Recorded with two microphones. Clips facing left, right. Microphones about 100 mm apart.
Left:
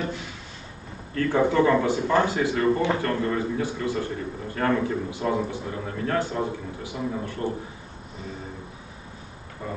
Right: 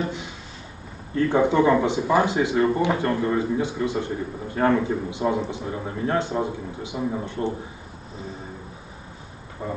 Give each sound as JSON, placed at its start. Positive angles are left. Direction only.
{"t": 0.0, "sound": "a sound", "side_deg": -20}
{"t": 1.1, "sound": "a man's voice", "side_deg": -15}
{"t": 9.6, "sound": "speech", "side_deg": -20}